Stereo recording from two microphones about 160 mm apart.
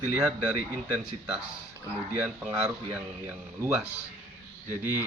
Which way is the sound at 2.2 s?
5° right (ahead or behind).